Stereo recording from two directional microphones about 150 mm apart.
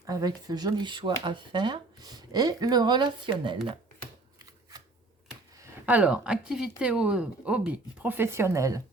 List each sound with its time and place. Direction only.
0.0 s speech: 25° right (ahead or behind)
5.8 s speech: 10° right (ahead or behind)